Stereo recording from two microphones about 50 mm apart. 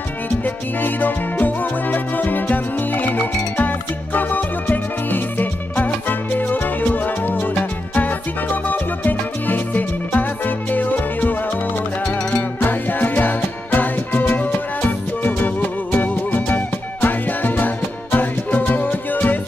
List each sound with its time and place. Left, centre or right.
0.7 s music: left
12.2 s music: centre
12.5 s music: left